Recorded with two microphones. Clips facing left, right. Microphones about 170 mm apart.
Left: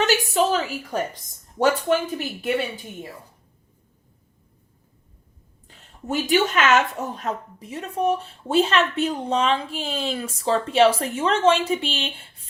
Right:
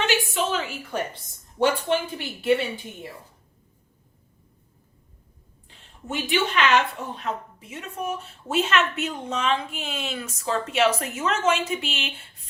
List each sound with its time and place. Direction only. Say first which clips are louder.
0.0 s a sound: left 4 dB; 40° left (ahead or behind)
1.1 s speech: left 5 dB; 45° left (ahead or behind)
5.6 s speech: left 5 dB; 40° left (ahead or behind)